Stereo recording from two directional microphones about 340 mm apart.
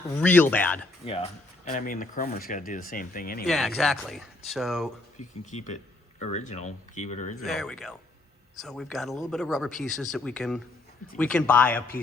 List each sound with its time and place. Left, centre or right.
0.2 s speech: centre
1.0 s speech: centre
3.4 s speech: centre
5.5 s speech: centre
7.4 s speech: centre